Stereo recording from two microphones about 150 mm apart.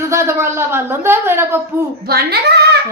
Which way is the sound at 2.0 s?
90° right.